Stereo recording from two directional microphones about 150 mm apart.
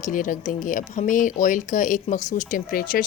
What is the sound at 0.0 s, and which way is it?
Speech, 65° left (ahead or behind).